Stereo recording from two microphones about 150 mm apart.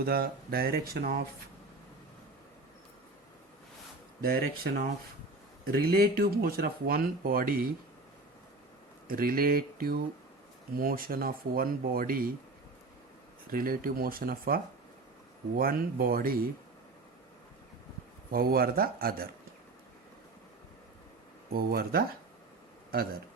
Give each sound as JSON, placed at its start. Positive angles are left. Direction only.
{"t": 0.0, "sound": "speech", "side_deg": -90}
{"t": 4.2, "sound": "speech", "side_deg": -85}
{"t": 9.0, "sound": "speech", "side_deg": -75}
{"t": 13.5, "sound": "speech", "side_deg": -75}
{"t": 18.3, "sound": "speech", "side_deg": -80}
{"t": 21.5, "sound": "speech", "side_deg": -90}
{"t": 22.9, "sound": "speech", "side_deg": -80}